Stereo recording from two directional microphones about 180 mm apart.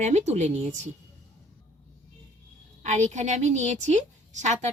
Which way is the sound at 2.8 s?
40° right (ahead or behind).